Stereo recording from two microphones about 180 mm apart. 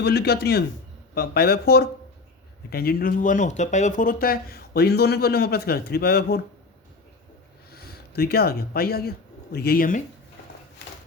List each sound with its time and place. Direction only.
0.0 s speech: 65° left (ahead or behind)
7.7 s speech: 60° left (ahead or behind)